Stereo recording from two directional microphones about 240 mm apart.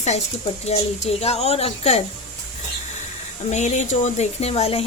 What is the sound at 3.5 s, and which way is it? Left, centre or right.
Speech, left.